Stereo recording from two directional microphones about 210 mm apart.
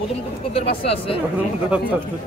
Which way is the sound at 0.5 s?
30° left (ahead or behind).